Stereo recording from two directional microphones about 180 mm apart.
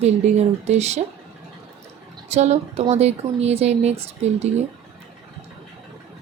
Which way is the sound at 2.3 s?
35° right (ahead or behind).